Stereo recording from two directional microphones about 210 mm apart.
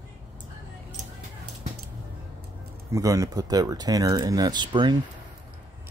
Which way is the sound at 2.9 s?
15° right (ahead or behind).